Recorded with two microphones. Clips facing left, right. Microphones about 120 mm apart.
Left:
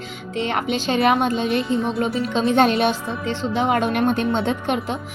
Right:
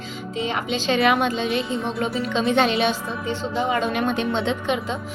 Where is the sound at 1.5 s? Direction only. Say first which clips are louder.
Left 3 dB; centre (ahead or behind).